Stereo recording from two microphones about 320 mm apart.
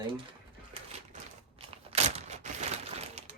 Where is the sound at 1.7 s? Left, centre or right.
Centre.